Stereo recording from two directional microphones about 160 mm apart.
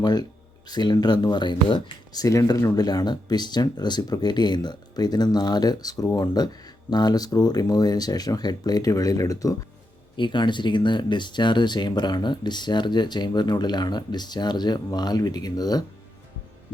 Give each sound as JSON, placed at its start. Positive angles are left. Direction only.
{"t": 0.0, "sound": "speech", "side_deg": 25}